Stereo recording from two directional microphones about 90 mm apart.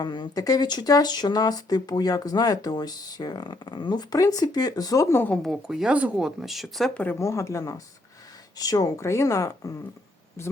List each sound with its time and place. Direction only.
0.0 s speech: 55° left (ahead or behind); by 5.2 s 35° left (ahead or behind)
5.4 s speech: 5° right (ahead or behind)
6.9 s speech: 15° left (ahead or behind)
7.2 s speech: 35° left (ahead or behind)